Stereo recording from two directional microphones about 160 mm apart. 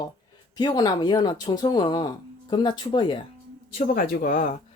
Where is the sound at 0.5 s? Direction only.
25° left (ahead or behind).